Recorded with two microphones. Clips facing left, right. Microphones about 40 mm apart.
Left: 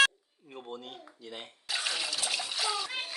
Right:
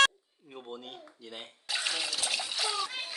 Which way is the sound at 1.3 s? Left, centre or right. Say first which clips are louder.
Even; centre.